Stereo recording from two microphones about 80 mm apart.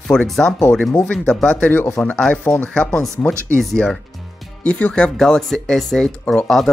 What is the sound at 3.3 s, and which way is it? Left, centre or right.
Speech, right.